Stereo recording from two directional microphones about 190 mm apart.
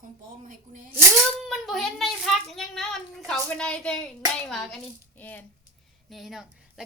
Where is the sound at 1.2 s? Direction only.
Centre (ahead or behind).